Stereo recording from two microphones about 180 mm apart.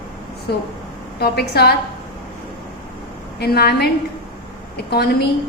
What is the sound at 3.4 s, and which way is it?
A woman's voice, 60° left (ahead or behind).